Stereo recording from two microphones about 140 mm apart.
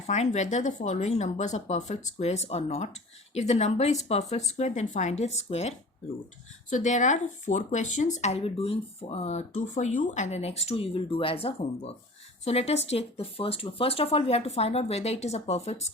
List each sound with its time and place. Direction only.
0.1 s speech: 60° left (ahead or behind)
6.7 s speech: 60° left (ahead or behind)